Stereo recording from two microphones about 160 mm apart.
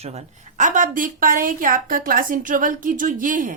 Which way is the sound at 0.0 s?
40° right (ahead or behind).